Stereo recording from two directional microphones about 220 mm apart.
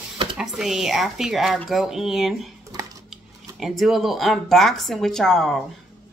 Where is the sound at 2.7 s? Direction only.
15° right (ahead or behind).